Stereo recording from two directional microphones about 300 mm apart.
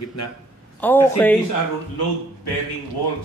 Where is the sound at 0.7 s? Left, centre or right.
Centre.